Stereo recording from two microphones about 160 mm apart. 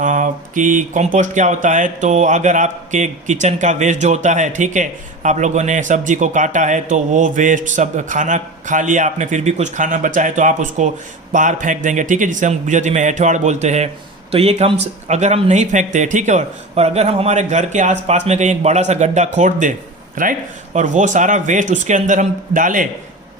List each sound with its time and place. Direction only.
0.0 s speech: 55° right (ahead or behind)